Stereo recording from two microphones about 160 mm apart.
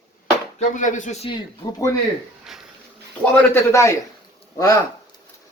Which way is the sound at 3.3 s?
15° left (ahead or behind).